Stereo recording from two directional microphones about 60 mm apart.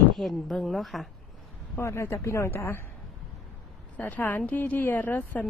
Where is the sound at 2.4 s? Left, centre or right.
Left.